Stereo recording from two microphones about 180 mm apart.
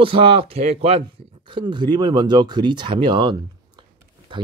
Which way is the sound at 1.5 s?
25° right (ahead or behind).